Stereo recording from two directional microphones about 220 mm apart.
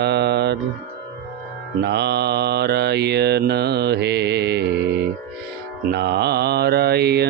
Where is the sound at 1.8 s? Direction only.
50° right (ahead or behind).